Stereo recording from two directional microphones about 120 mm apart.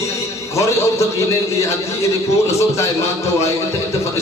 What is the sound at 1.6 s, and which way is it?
A man's voice, 25° left (ahead or behind).